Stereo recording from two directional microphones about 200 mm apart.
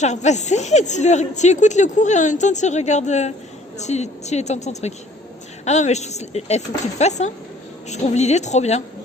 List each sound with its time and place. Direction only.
0.0 s speech: 35° left (ahead or behind)